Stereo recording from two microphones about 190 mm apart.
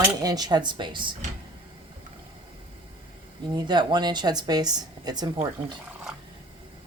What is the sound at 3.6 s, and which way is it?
A woman's voice, 25° right (ahead or behind).